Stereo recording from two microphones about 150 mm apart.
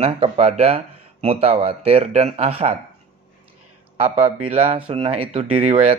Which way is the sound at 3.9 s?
45° right (ahead or behind).